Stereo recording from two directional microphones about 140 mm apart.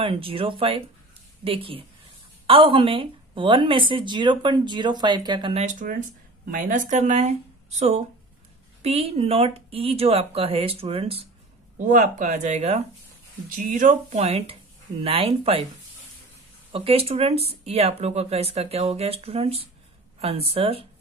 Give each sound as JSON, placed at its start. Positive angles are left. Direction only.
{"t": 0.0, "sound": "a woman's voice", "side_deg": -40}
{"t": 5.5, "sound": "speech", "side_deg": -50}
{"t": 5.9, "sound": "speech", "side_deg": -75}
{"t": 8.8, "sound": "speech", "side_deg": -45}
{"t": 11.8, "sound": "speech", "side_deg": -65}
{"t": 13.5, "sound": "speech", "side_deg": -70}
{"t": 16.7, "sound": "speech", "side_deg": -45}